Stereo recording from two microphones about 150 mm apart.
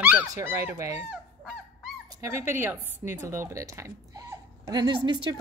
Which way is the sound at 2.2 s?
15° right (ahead or behind).